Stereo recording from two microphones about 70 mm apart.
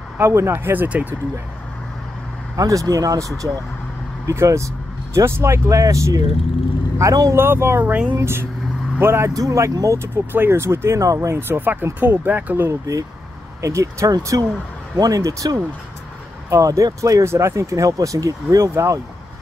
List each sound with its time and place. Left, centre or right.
0.2 s speech: right
2.5 s speech: right
7.3 s speech: right
7.8 s speech: right
8.2 s speech: right
9.3 s speech: right
11.1 s speech: right
12.6 s speech: right
15.0 s speech: right